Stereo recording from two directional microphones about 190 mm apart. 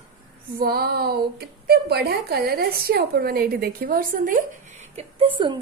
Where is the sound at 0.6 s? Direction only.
55° right (ahead or behind).